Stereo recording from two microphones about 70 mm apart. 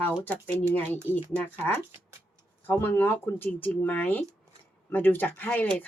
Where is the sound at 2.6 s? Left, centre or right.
Left.